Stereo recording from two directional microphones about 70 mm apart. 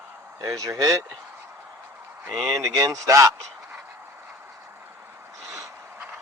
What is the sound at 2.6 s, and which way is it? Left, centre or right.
Speech, right.